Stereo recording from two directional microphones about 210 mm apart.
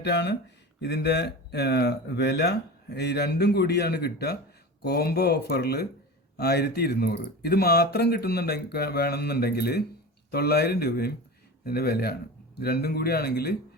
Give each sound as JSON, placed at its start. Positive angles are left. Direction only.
{"t": 0.0, "sound": "speech", "side_deg": 55}